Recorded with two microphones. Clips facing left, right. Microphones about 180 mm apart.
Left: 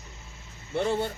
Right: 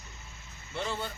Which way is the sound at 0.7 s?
55° left (ahead or behind).